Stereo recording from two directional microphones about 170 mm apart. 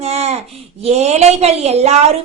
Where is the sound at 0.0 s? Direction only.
40° right (ahead or behind).